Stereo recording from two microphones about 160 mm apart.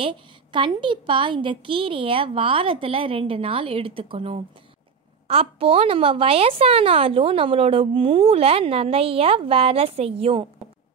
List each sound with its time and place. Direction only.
0.0 s speech: 30° right (ahead or behind)